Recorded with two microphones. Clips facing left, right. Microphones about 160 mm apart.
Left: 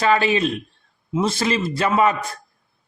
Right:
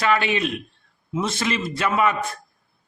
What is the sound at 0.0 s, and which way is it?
A man's voice, 35° left (ahead or behind).